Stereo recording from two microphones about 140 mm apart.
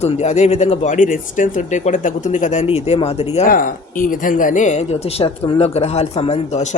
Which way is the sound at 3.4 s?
80° left.